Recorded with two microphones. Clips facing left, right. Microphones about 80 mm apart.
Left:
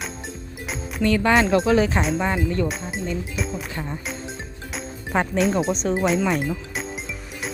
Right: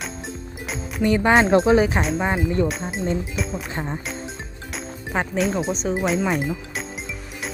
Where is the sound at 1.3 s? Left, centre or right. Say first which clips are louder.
Right 3 dB; right.